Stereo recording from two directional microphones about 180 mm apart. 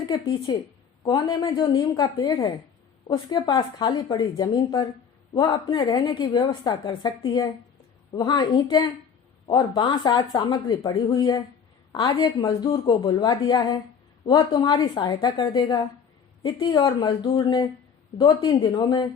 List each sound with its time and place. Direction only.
0.1 s a woman's voice: 25° left (ahead or behind)